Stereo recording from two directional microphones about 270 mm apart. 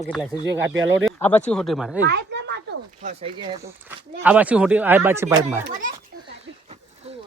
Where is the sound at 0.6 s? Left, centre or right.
Right.